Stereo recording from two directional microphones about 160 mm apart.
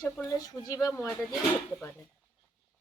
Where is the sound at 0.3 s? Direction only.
20° left (ahead or behind).